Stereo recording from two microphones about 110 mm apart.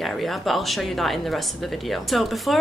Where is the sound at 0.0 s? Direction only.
Centre (ahead or behind).